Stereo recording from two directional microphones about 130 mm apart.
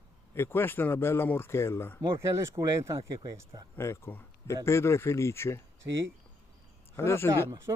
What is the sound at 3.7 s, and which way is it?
Speech, 20° left (ahead or behind).